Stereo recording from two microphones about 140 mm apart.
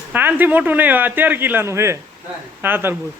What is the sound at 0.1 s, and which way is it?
Speech, 15° right (ahead or behind).